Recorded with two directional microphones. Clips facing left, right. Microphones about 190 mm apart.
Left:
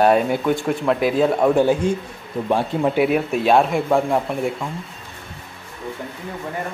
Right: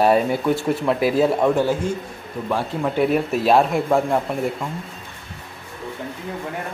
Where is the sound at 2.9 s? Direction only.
5° left (ahead or behind).